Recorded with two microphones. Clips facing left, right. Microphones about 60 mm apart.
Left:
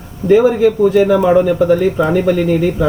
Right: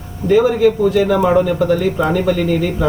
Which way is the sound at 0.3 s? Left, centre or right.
Centre.